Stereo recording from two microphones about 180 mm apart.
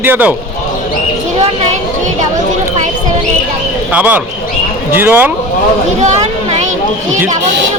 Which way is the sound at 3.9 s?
10° right (ahead or behind).